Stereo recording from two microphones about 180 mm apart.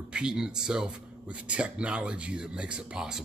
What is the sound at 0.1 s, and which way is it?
Speech, 5° right (ahead or behind).